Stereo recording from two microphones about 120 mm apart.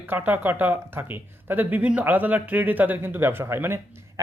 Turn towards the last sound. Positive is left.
turn(degrees=-20)  # may be behind; listen again after turning